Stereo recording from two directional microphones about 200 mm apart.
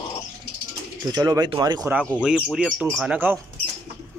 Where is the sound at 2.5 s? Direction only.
5° right (ahead or behind).